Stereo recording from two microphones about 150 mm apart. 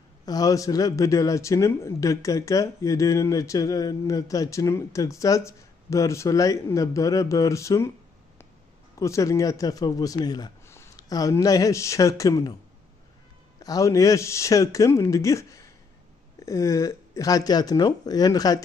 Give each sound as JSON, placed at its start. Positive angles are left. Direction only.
{"t": 0.2, "sound": "speech", "side_deg": 25}
{"t": 8.9, "sound": "speech", "side_deg": 20}
{"t": 13.6, "sound": "speech", "side_deg": 25}